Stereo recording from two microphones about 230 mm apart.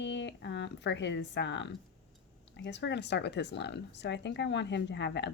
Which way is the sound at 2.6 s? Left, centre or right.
Left.